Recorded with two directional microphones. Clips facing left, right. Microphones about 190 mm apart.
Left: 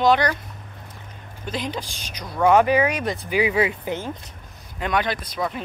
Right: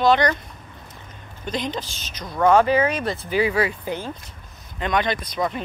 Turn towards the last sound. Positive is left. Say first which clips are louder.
# right 2 dB
turn(degrees=5)  # may be behind; listen again after turning